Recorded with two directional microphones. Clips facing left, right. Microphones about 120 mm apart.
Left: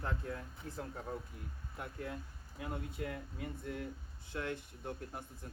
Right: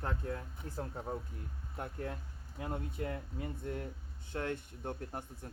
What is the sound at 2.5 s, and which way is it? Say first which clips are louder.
Speech: right 2 dB; 30° right (ahead or behind).